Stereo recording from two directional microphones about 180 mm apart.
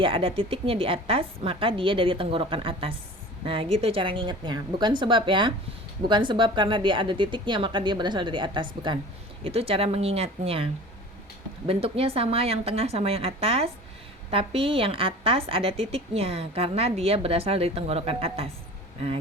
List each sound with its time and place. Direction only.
0.0 s a woman's voice: 30° right (ahead or behind)